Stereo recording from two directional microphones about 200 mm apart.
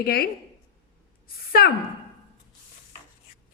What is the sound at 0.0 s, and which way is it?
Speech, 50° left (ahead or behind).